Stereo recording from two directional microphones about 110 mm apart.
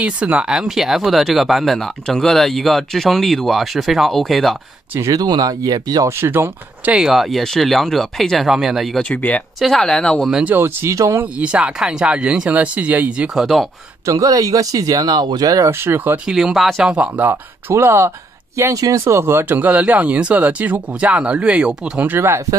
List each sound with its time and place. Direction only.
0.0 s speech: 10° right (ahead or behind)
5.1 s speech: 35° right (ahead or behind)
6.0 s speech: 20° right (ahead or behind); by 9.0 s centre (ahead or behind)
9.1 s speech: 15° left (ahead or behind)
10.3 s speech: 15° right (ahead or behind)
11.3 s speech: 10° right (ahead or behind)
14.0 s speech: 30° right (ahead or behind)
15.7 s speech: 20° right (ahead or behind)
16.3 s speech: 5° right (ahead or behind)